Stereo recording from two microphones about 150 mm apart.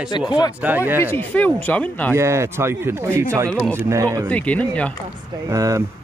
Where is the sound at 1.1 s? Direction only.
10° left (ahead or behind).